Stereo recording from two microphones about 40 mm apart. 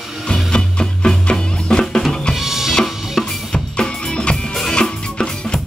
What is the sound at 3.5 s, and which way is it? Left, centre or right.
Music, left.